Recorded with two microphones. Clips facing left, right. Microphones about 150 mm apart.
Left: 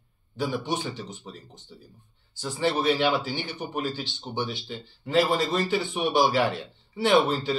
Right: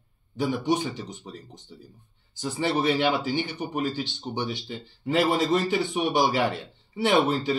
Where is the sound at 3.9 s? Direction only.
15° right (ahead or behind).